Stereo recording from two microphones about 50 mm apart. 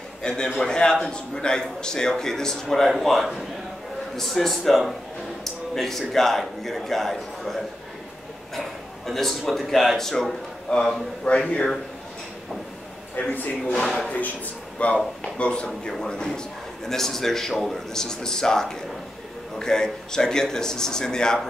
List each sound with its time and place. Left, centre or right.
0.2 s a man's voice: centre
13.3 s a man's voice: left; by 21.4 s centre